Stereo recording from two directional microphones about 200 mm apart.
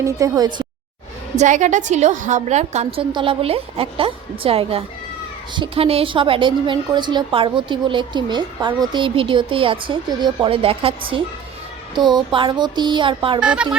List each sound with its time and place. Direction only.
0.0 s a woman's voice: 15° right (ahead or behind)
1.4 s a woman's voice: 40° right (ahead or behind)
13.4 s speech: 5° right (ahead or behind)